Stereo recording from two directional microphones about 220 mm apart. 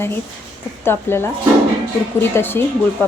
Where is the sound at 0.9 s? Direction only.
10° left (ahead or behind).